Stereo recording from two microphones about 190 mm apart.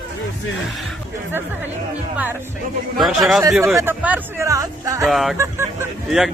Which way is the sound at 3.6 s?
15° right (ahead or behind).